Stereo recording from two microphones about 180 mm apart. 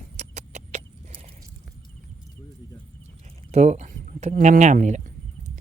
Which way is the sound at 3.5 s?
40° right (ahead or behind).